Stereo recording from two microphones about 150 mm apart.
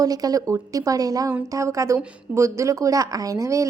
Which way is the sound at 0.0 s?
25° right (ahead or behind).